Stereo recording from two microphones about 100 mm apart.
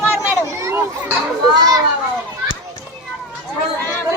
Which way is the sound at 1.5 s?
40° right (ahead or behind).